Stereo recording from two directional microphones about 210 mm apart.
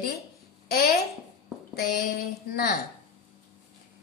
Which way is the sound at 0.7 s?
50° left (ahead or behind).